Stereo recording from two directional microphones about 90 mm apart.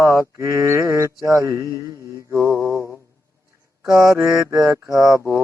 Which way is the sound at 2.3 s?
30° left (ahead or behind).